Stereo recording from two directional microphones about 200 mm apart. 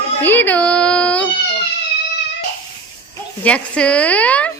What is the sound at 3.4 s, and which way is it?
Speech, 5° left (ahead or behind).